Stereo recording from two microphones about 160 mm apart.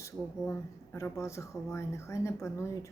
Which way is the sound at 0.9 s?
15° left (ahead or behind).